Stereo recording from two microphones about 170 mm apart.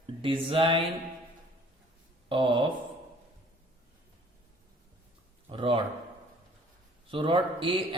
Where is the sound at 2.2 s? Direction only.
30° right (ahead or behind).